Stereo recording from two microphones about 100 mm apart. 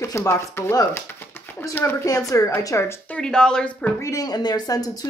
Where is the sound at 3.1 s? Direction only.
10° left (ahead or behind).